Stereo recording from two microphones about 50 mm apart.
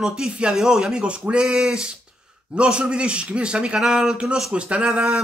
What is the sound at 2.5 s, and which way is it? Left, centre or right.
Speech, right.